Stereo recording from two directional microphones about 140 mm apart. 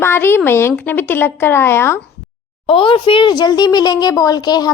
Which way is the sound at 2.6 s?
40° left (ahead or behind).